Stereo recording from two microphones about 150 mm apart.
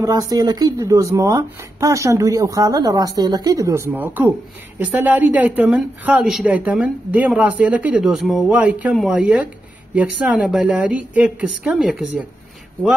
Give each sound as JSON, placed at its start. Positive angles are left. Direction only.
{"t": 0.0, "sound": "a woman's voice", "side_deg": -25}